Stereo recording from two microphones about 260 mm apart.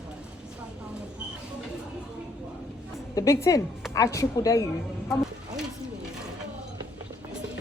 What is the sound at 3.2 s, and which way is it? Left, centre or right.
Speech, centre.